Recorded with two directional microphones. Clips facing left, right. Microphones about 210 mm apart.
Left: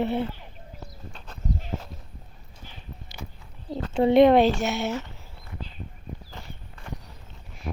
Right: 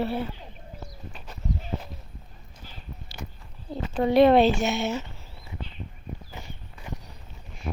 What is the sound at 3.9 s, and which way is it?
Speech, 25° left (ahead or behind).